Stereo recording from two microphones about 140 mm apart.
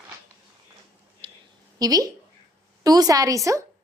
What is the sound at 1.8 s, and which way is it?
A woman's voice, 25° right (ahead or behind).